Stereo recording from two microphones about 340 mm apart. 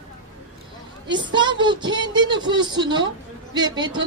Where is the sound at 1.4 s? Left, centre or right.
Centre.